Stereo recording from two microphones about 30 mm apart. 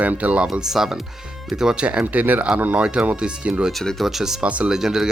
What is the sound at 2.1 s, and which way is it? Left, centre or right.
Speech, right.